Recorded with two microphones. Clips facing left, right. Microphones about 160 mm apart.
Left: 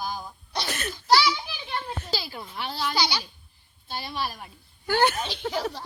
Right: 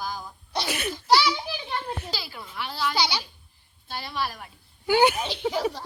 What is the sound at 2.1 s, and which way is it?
Speech, 25° left (ahead or behind).